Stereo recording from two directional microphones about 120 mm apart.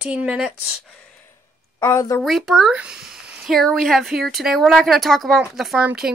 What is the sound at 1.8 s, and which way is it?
Speech, 25° left (ahead or behind).